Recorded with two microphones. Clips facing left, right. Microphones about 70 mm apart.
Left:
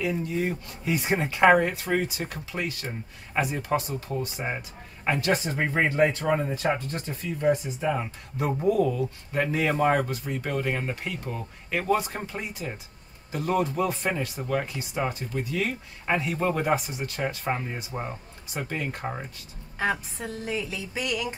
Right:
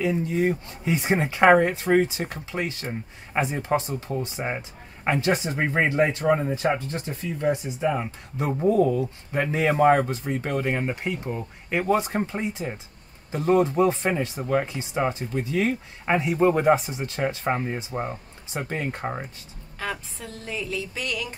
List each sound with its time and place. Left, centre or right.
0.0 s speech: right
7.4 s speech: centre
8.6 s speech: right; by 16.6 s centre
16.6 s speech: right
20.3 s music: centre